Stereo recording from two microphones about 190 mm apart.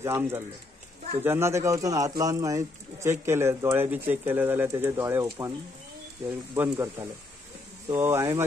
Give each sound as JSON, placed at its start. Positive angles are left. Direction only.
{"t": 0.0, "sound": "speech", "side_deg": -15}